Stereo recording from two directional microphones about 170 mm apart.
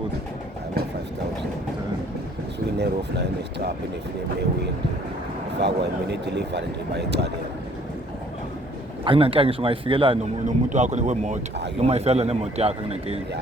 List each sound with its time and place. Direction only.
2.7 s speech: 75° right (ahead or behind)
5.5 s speech: 85° right
9.0 s speech: 35° right (ahead or behind)
10.4 s speech: 45° right (ahead or behind)